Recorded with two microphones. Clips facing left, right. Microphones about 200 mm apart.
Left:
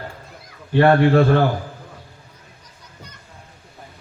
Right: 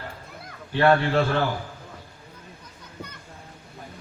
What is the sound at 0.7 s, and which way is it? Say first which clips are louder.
Speech: left 6 dB; 50° left (ahead or behind).